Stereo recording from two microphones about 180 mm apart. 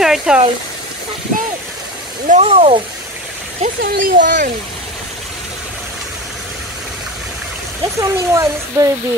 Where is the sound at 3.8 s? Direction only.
50° right (ahead or behind).